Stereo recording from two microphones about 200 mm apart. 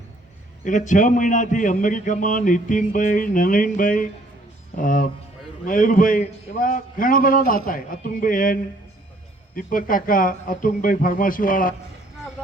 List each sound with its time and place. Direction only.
0.6 s a man's voice: 40° left (ahead or behind)
9.6 s a man's voice: 45° left (ahead or behind)